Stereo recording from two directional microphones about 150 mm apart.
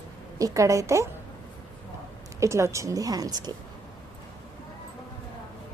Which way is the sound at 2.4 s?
20° right (ahead or behind).